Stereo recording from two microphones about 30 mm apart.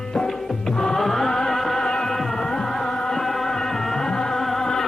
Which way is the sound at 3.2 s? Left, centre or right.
Centre.